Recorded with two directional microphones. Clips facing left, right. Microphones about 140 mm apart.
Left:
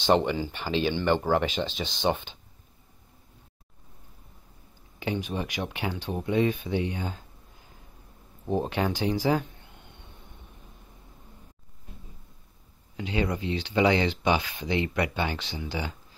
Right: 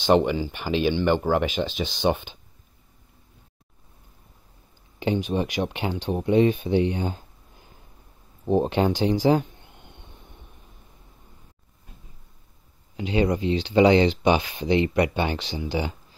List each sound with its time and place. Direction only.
0.0 s speech: 10° right (ahead or behind)
5.0 s speech: 25° right (ahead or behind)
8.5 s speech: 25° right (ahead or behind)
12.9 s speech: 20° right (ahead or behind)